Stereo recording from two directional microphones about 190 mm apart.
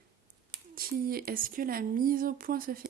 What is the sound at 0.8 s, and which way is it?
Speech, 50° right (ahead or behind).